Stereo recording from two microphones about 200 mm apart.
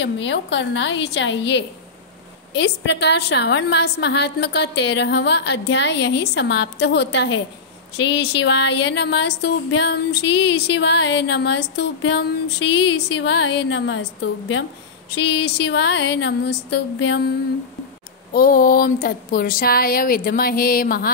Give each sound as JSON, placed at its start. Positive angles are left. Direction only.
{"t": 0.0, "sound": "speech", "side_deg": 65}
{"t": 15.0, "sound": "speech", "side_deg": 60}
{"t": 18.3, "sound": "speech", "side_deg": 45}